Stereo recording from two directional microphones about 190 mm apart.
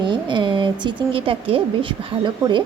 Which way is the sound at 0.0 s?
25° right (ahead or behind).